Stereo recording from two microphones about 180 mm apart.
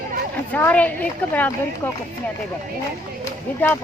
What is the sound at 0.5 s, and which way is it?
A woman's voice, 10° left (ahead or behind).